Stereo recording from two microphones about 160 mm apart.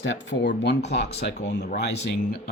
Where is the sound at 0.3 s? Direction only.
90° left.